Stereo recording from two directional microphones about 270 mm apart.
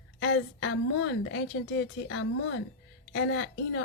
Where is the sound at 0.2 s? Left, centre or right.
Left.